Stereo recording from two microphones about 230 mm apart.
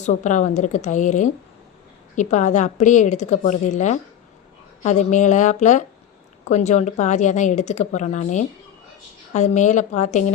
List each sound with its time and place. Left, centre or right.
0.0 s speech: left